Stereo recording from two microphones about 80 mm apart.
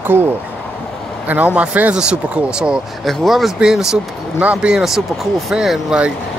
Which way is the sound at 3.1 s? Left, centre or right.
Centre.